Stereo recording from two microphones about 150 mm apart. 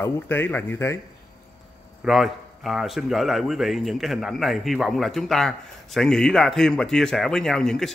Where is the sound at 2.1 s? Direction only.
Centre (ahead or behind).